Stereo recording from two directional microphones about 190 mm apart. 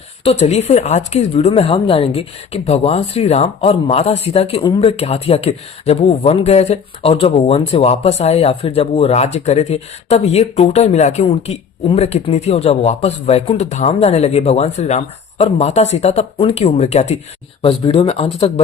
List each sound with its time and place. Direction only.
0.3 s a woman's voice: 35° left (ahead or behind)